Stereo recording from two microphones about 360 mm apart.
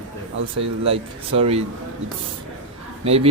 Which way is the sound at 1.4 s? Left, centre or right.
Centre.